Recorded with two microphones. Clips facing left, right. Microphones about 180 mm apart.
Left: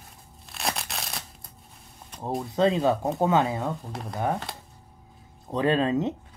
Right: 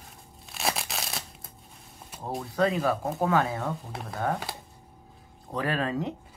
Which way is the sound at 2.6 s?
25° left (ahead or behind).